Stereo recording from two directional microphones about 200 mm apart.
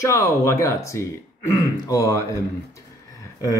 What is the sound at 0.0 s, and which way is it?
Speech, 15° left (ahead or behind).